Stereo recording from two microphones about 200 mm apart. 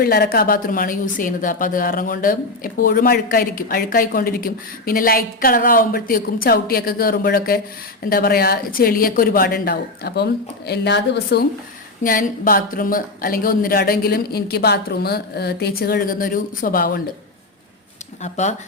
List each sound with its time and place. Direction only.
0.0 s a woman's voice: 50° left (ahead or behind)
12.0 s a woman's voice: 45° left (ahead or behind)
18.2 s speech: 35° left (ahead or behind)